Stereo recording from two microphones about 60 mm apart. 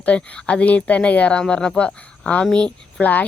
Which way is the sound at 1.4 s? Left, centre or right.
Centre.